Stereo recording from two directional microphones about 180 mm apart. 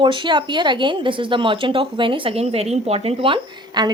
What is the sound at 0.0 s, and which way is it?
Speech, 25° right (ahead or behind).